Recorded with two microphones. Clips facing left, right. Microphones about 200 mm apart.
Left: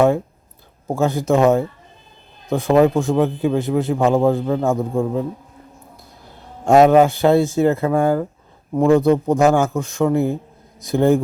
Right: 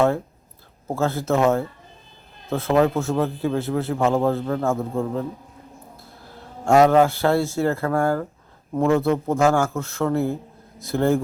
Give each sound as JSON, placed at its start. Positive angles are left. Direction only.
{"t": 0.9, "sound": "a man's voice", "side_deg": 15}
{"t": 6.7, "sound": "a man's voice", "side_deg": 20}